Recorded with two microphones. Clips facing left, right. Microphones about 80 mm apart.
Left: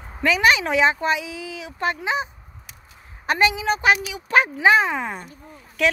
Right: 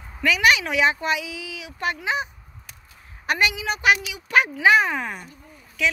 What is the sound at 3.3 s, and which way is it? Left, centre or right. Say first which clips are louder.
Speech: left 3 dB; left.